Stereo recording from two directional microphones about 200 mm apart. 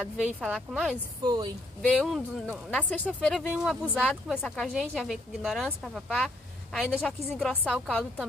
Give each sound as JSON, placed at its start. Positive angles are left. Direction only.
{"t": 0.0, "sound": "speech", "side_deg": 0}
{"t": 1.2, "sound": "a woman's voice", "side_deg": -20}
{"t": 2.0, "sound": "speech", "side_deg": 0}